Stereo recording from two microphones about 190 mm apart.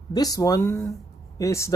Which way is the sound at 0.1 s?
20° left (ahead or behind).